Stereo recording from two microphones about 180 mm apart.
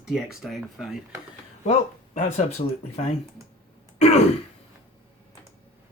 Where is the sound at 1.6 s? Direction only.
40° left (ahead or behind).